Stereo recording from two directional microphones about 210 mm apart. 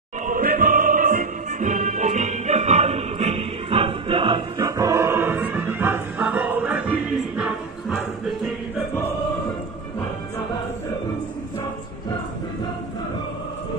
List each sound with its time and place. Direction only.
0.3 s music: 45° right (ahead or behind); by 8.0 s 5° right (ahead or behind)